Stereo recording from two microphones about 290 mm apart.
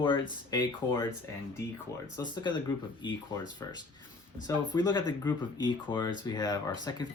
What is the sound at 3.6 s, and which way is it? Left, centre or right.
Speech, centre.